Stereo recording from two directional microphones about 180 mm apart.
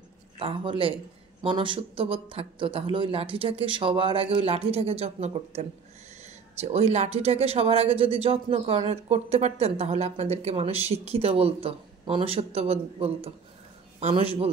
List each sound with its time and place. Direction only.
0.4 s a man's voice: 30° right (ahead or behind)